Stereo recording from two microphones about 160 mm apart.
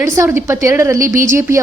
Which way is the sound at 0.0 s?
15° right (ahead or behind).